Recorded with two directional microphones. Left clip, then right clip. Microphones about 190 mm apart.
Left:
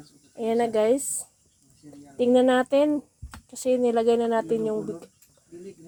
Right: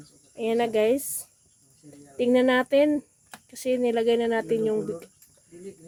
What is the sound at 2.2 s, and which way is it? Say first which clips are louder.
Speech: left 1 dB; centre (ahead or behind).